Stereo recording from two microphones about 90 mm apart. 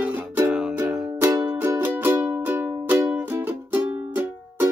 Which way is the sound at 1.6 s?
25° right (ahead or behind).